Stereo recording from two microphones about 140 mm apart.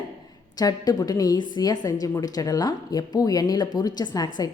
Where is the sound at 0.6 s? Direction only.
25° left (ahead or behind).